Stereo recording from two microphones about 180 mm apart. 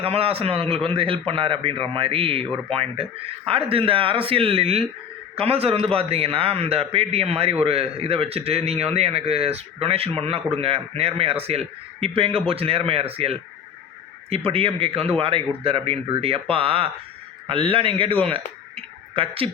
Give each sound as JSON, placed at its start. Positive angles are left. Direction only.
{"t": 0.0, "sound": "speech", "side_deg": -30}